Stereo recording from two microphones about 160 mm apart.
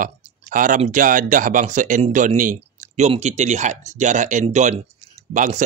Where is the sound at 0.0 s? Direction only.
55° right (ahead or behind).